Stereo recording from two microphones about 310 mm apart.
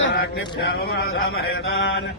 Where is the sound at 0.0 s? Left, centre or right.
Left.